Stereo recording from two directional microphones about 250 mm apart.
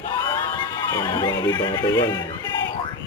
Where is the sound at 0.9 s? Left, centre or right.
Centre.